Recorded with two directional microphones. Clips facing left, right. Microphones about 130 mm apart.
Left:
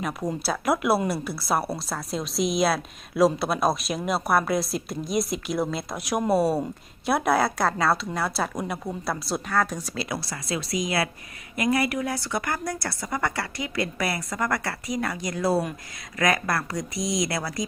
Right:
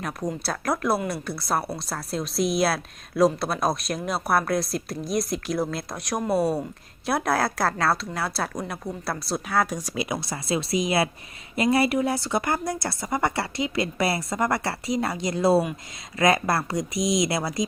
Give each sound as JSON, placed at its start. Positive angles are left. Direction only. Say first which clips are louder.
{"t": 0.4, "sound": "a woman's voice", "louder": "left 3 dB", "side_deg": 5}
{"t": 9.5, "sound": "a woman's voice", "louder": "right 1 dB", "side_deg": -10}